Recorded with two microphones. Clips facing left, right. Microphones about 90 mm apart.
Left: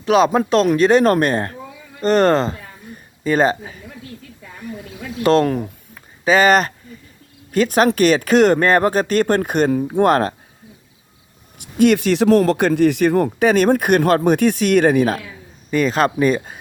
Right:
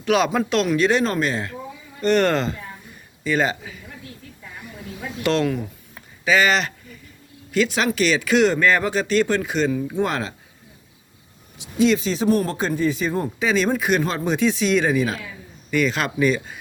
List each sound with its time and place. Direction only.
0.0 s speech: 35° left (ahead or behind); by 1.5 s 50° left (ahead or behind)
2.0 s speech: 35° left (ahead or behind)
5.2 s speech: 40° left (ahead or behind)
11.5 s a man's voice: 55° left (ahead or behind)
15.7 s speech: 40° left (ahead or behind)